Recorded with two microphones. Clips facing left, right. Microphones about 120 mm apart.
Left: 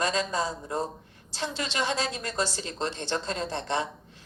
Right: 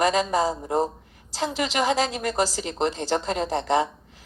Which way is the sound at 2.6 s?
20° right (ahead or behind).